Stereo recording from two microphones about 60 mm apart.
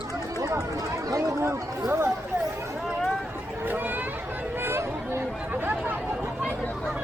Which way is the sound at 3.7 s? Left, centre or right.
Right.